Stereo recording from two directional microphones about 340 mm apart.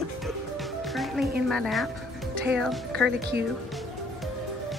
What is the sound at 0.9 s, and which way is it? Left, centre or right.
Music, centre.